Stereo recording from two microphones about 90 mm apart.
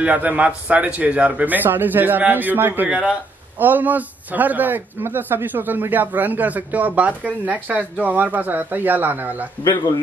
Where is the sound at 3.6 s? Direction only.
20° right (ahead or behind).